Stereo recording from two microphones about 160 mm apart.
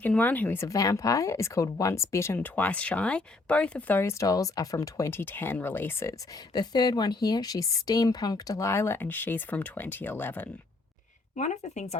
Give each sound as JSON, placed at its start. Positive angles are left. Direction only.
{"t": 0.0, "sound": "speech", "side_deg": 10}
{"t": 6.5, "sound": "speech", "side_deg": 25}
{"t": 11.3, "sound": "speech", "side_deg": 45}